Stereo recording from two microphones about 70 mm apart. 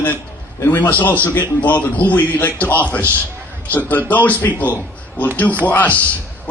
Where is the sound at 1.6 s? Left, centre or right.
Left.